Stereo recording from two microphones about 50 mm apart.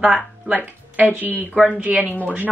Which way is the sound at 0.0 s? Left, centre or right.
Centre.